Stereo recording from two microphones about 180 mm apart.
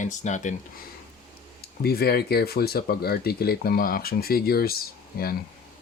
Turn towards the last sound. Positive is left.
turn(degrees=55)  # may be behind; listen again after turning